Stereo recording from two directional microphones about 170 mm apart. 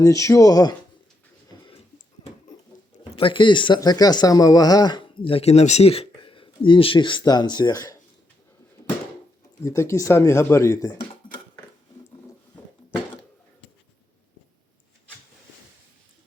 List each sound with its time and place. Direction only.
0.0 s speech: 20° left (ahead or behind)
3.0 s speech: 30° left (ahead or behind)
9.6 s speech: 15° left (ahead or behind)